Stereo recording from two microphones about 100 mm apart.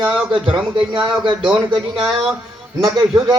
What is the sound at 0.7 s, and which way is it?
Speech, 50° right (ahead or behind).